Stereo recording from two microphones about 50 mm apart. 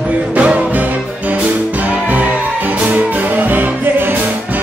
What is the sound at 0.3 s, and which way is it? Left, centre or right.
Music, right.